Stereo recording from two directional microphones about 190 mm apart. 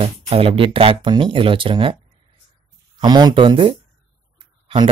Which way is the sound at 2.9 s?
20° right (ahead or behind).